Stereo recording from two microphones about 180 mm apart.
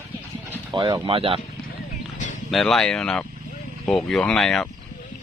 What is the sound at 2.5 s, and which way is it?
Speech, centre (ahead or behind).